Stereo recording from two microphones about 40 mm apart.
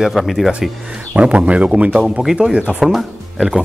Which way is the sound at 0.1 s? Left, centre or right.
Centre.